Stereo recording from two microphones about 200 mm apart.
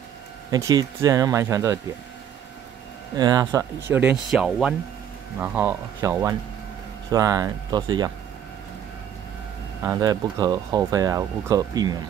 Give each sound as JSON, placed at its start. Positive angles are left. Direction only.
{"t": 0.5, "sound": "speech", "side_deg": -20}
{"t": 3.2, "sound": "speech", "side_deg": -20}
{"t": 9.8, "sound": "speech", "side_deg": -20}